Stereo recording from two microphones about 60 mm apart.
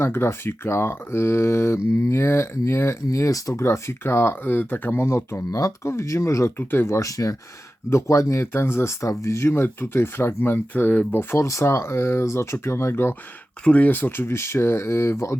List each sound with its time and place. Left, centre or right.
0.0 s speech: left
3.5 s speech: left
5.5 s speech: left
5.8 s speech: left
6.6 s speech: left
7.0 s speech: left
7.9 s speech: left
11.4 s speech: left
13.7 s speech: left